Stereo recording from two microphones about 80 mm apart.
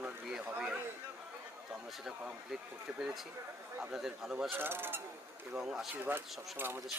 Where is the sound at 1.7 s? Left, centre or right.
Centre.